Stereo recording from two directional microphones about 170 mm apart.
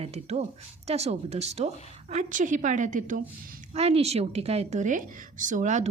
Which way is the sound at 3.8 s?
40° right (ahead or behind).